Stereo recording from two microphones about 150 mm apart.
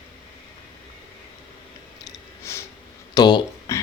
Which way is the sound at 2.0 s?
20° left (ahead or behind).